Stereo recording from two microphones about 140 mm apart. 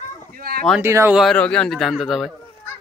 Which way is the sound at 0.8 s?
20° right (ahead or behind).